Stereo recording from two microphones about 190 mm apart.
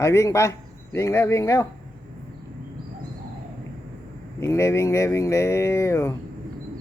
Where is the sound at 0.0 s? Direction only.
15° left (ahead or behind).